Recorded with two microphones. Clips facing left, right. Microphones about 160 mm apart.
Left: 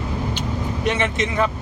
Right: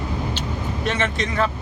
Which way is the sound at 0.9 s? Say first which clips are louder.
Left 2 dB; 15° left (ahead or behind).